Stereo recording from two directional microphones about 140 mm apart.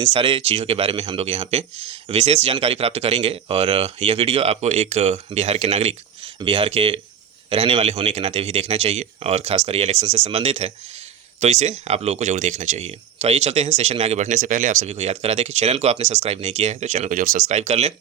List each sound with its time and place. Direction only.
0.0 s speech: 40° right (ahead or behind); by 17.4 s 70° right (ahead or behind)
17.5 s speech: 50° right (ahead or behind)